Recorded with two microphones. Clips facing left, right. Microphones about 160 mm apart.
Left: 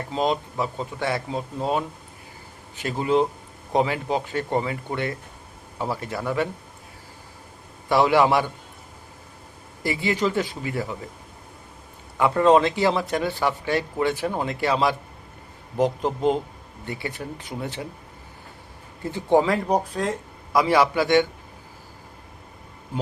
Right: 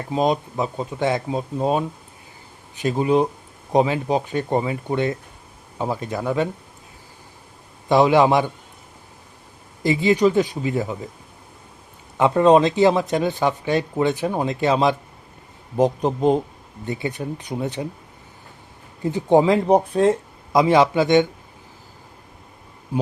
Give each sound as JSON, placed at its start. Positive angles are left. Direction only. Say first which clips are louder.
{"t": 0.1, "sound": "speech", "louder": "right 4 dB", "side_deg": -20}
{"t": 7.9, "sound": "speech", "louder": "right 3 dB", "side_deg": -20}
{"t": 9.8, "sound": "speech", "louder": "right 7 dB", "side_deg": -20}
{"t": 12.1, "sound": "speech", "louder": "right 3 dB", "side_deg": -20}
{"t": 19.0, "sound": "speech", "louder": "right 4 dB", "side_deg": -15}